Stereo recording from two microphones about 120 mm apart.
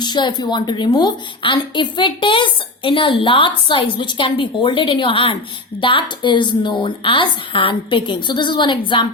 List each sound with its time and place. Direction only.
0.0 s a woman's voice: 40° left (ahead or behind)